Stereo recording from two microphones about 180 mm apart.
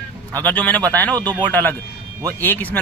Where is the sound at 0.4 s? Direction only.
10° left (ahead or behind).